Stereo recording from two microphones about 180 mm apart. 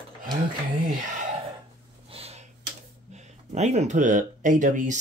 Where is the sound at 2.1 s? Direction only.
35° right (ahead or behind).